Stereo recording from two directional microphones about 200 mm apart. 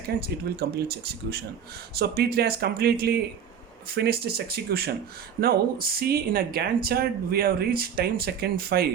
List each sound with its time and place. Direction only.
0.2 s speech: 50° right (ahead or behind)